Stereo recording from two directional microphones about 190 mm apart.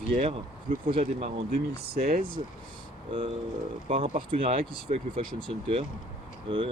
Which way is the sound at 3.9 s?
30° right (ahead or behind).